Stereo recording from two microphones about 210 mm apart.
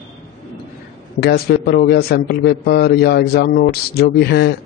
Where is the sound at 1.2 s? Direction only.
50° left (ahead or behind).